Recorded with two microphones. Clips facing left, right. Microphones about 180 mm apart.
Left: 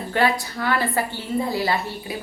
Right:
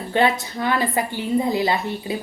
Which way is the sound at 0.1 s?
20° right (ahead or behind).